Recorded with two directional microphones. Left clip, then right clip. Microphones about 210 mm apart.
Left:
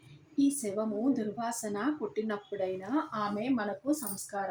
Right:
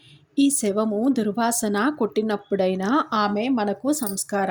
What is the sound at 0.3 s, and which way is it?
Speech, 30° right (ahead or behind).